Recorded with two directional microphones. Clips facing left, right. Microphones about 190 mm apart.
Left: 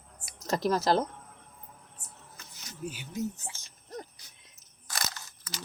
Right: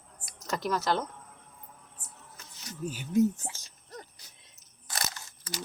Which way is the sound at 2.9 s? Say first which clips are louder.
Right 11 dB; 45° right (ahead or behind).